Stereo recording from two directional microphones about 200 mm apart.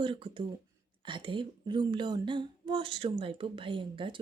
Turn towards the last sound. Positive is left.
turn(degrees=-25)  # may be behind; listen again after turning